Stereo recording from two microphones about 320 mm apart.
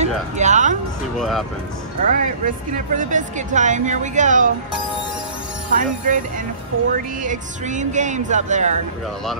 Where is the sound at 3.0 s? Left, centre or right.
Right.